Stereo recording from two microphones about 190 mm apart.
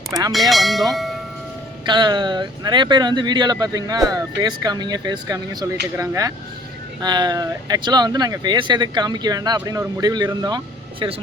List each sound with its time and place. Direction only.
0.1 s speech: 20° right (ahead or behind)
0.3 s speech: centre (ahead or behind)
1.9 s speech: 25° right (ahead or behind)